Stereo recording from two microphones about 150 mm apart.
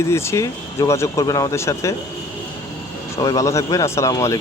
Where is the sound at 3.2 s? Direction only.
20° left (ahead or behind).